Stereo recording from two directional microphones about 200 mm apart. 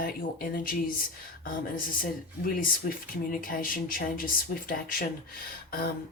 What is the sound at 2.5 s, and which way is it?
Speech, 45° left (ahead or behind).